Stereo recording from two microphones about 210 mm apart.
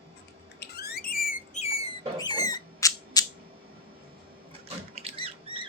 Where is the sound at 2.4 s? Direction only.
15° left (ahead or behind).